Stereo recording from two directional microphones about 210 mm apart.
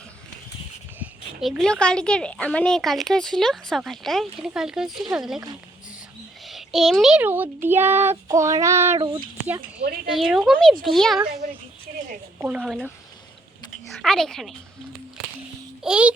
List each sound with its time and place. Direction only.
0.9 s speech: centre (ahead or behind)
6.4 s speech: centre (ahead or behind)
8.3 s child singing: 15° right (ahead or behind)
9.0 s speech: 20° right (ahead or behind)
10.1 s speech: centre (ahead or behind)
11.9 s a sound: 45° right (ahead or behind)
12.4 s speech: 5° right (ahead or behind)
14.0 s speech: centre (ahead or behind)
15.8 s speech: 5° right (ahead or behind)